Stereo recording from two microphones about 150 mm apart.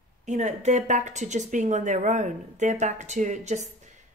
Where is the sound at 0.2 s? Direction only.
50° right (ahead or behind).